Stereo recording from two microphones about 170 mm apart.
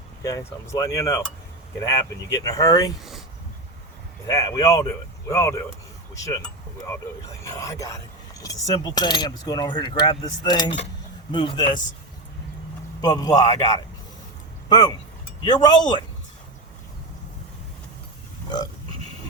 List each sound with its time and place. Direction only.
0.2 s speech: 20° left (ahead or behind)
3.0 s a sound: centre (ahead or behind)
4.3 s speech: 20° left (ahead or behind)
7.4 s speech: 20° left (ahead or behind)
13.0 s speech: 25° left (ahead or behind)
18.4 s a sound: 25° left (ahead or behind)